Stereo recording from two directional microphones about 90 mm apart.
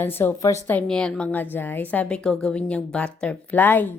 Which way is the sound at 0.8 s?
10° left (ahead or behind).